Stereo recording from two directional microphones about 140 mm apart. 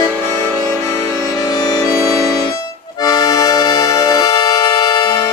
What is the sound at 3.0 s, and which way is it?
Accordion, 30° left (ahead or behind).